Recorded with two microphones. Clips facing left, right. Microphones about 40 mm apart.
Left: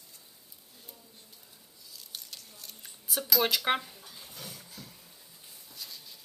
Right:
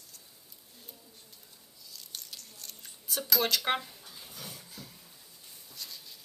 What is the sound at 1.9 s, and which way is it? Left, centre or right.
Squish, centre.